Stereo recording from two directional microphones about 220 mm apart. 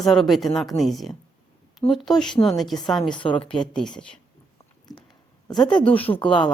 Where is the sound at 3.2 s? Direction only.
25° left (ahead or behind).